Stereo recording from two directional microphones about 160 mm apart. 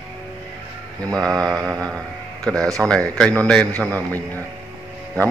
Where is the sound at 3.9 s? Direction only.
20° right (ahead or behind).